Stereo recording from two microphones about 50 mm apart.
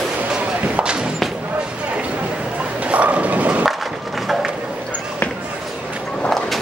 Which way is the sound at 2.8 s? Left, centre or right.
Right.